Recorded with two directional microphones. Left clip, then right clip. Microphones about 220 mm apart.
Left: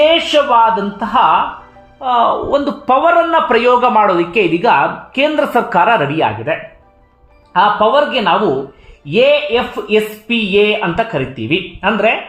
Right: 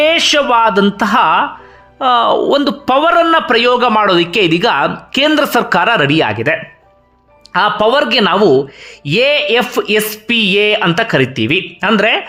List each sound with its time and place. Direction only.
0.0 s a man's voice: 30° right (ahead or behind)
7.5 s speech: 25° right (ahead or behind)